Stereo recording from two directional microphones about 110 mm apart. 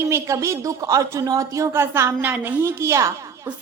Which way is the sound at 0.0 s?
25° right (ahead or behind).